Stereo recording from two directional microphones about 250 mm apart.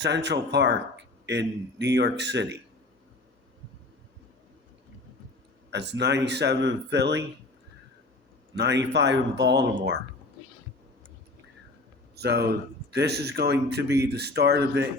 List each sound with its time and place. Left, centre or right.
0.0 s speech: right
5.7 s speech: right
8.5 s speech: right
12.1 s speech: right